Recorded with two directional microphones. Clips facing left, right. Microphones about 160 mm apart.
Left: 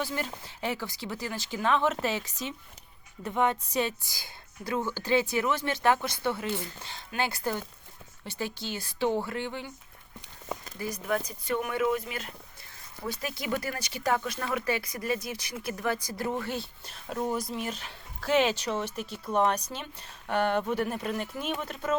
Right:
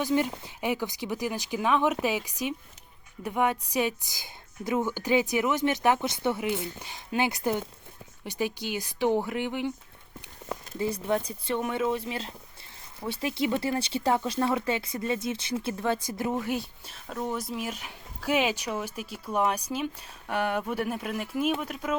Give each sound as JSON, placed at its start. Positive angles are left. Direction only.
{"t": 0.0, "sound": "speech", "side_deg": -15}
{"t": 10.8, "sound": "speech", "side_deg": -25}
{"t": 16.9, "sound": "speech", "side_deg": 5}